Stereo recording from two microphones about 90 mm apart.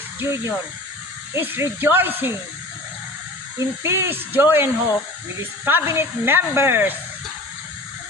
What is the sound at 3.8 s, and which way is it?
Speech, 30° right (ahead or behind).